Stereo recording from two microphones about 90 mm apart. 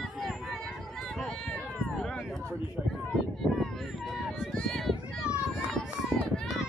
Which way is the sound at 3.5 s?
Centre (ahead or behind).